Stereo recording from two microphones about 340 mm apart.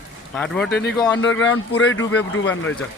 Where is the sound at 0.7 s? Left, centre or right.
Left.